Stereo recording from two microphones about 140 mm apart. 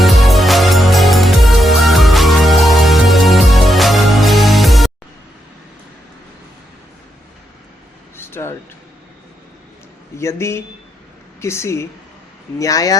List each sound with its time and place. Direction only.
0.0 s music: centre (ahead or behind)
8.1 s a sound: 15° left (ahead or behind)
10.2 s speech: 20° left (ahead or behind)